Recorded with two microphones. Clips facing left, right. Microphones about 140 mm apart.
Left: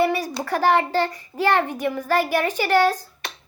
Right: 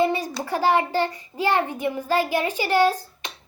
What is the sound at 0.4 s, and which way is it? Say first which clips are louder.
A woman's voice: left 1 dB; 15° right (ahead or behind).